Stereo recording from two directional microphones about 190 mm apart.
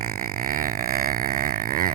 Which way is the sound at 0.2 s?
45° right (ahead or behind).